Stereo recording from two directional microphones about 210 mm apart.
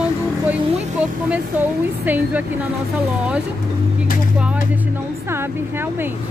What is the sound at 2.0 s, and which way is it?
Speech, 10° right (ahead or behind).